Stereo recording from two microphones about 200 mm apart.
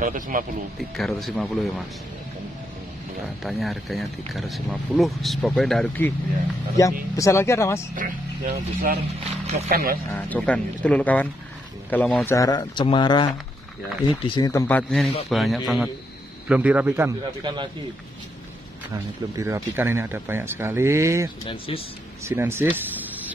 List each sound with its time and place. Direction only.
0.0 s speech: 40° right (ahead or behind)
0.7 s speech: centre (ahead or behind)
3.4 s speech: centre (ahead or behind)
6.8 s speech: 15° left (ahead or behind)
7.9 s speech: 45° right (ahead or behind)
10.1 s speech: 5° left (ahead or behind)
12.3 s speech: 15° left (ahead or behind); by 17.6 s 20° right (ahead or behind)
19.3 s speech: 15° right (ahead or behind)
21.5 s speech: 25° left (ahead or behind)
22.2 s speech: 10° right (ahead or behind)